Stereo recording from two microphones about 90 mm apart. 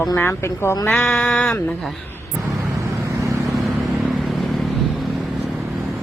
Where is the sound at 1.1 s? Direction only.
15° left (ahead or behind).